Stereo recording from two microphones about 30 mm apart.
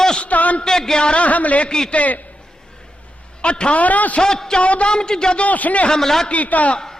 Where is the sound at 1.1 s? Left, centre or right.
Left.